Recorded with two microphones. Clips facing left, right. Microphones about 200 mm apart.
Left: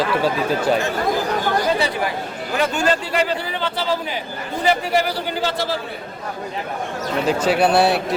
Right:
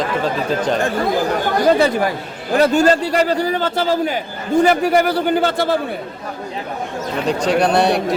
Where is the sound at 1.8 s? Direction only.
45° right (ahead or behind).